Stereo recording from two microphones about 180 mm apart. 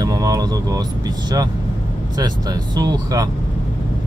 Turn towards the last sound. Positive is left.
turn(degrees=-20)  # may be behind; listen again after turning